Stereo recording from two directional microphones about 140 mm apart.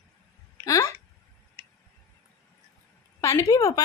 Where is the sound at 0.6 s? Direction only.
20° left (ahead or behind).